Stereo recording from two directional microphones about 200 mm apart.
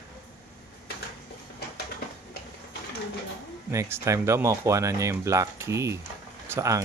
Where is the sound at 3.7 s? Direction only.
15° right (ahead or behind).